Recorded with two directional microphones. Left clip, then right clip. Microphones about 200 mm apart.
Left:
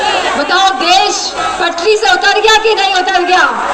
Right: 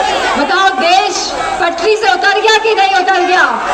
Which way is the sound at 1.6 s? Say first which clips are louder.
Left 1 dB; 40° left (ahead or behind).